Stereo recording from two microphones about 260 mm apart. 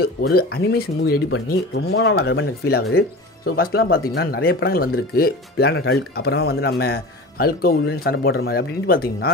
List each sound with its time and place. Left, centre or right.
0.0 s speech: left